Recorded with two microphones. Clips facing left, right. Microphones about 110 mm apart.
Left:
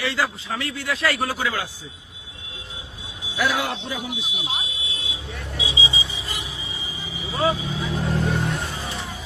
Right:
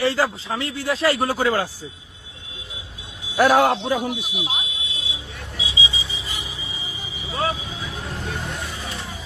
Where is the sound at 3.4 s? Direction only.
50° right (ahead or behind).